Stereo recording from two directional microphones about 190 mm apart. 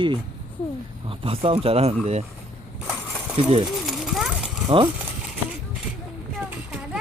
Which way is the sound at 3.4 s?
30° right (ahead or behind).